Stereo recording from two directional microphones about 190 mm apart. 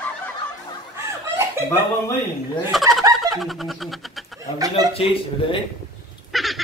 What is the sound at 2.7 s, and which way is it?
Speech, centre (ahead or behind).